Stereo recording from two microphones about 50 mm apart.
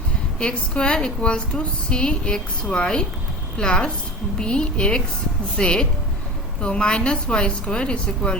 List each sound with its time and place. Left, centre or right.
0.3 s a woman's voice: centre